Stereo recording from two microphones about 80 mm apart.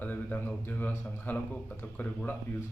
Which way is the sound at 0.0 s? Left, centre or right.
Left.